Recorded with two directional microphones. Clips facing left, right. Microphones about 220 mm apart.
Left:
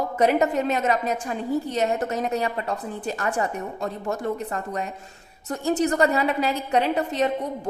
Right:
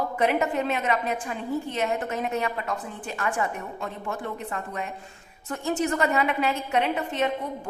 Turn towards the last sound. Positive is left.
turn(degrees=35)  # may be behind; listen again after turning